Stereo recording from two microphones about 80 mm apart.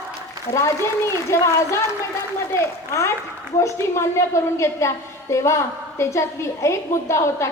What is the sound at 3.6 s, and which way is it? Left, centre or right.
A woman's voice, left.